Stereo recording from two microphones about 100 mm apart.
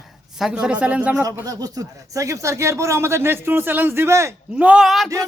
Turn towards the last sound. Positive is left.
turn(degrees=-5)  # may be behind; listen again after turning